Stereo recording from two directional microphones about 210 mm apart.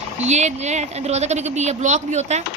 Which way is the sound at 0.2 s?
30° right (ahead or behind).